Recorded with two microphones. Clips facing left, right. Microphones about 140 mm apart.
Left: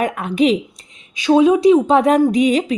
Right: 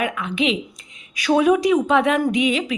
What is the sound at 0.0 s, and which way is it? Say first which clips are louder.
Speech: left 6 dB; 45° left (ahead or behind).